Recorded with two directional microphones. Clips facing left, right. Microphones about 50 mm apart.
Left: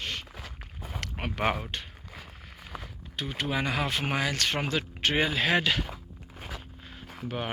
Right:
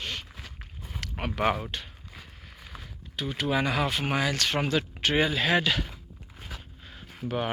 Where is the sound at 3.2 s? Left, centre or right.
Left.